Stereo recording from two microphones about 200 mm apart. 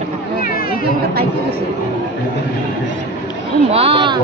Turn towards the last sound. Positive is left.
turn(degrees=-25)  # may be behind; listen again after turning